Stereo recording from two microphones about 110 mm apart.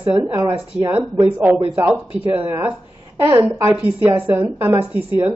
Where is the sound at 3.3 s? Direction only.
25° right (ahead or behind).